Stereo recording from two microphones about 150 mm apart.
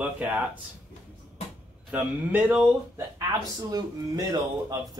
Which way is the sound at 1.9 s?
10° right (ahead or behind).